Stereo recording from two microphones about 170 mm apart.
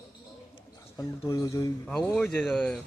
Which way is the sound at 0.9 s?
20° left (ahead or behind).